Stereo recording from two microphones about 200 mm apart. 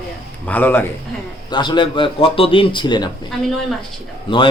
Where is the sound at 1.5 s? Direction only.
20° left (ahead or behind).